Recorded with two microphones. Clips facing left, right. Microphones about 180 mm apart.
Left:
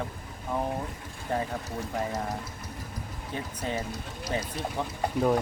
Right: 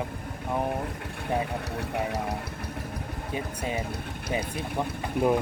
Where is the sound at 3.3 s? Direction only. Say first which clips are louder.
Right 1 dB; 10° right (ahead or behind).